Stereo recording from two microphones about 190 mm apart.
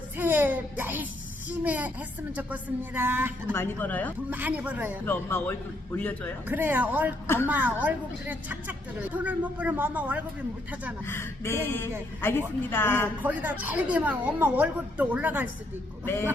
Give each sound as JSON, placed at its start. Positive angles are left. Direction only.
{"t": 0.2, "sound": "a sound", "side_deg": -10}
{"t": 1.5, "sound": "speech", "side_deg": -10}
{"t": 3.5, "sound": "a woman's voice", "side_deg": 10}
{"t": 4.3, "sound": "speech", "side_deg": -10}
{"t": 5.0, "sound": "a woman's voice", "side_deg": 10}
{"t": 6.5, "sound": "speech", "side_deg": -10}
{"t": 11.0, "sound": "a woman's voice", "side_deg": 10}
{"t": 13.2, "sound": "speech", "side_deg": -10}